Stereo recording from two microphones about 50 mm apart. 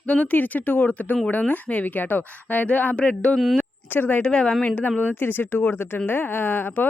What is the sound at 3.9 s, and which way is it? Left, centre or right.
Speech, left.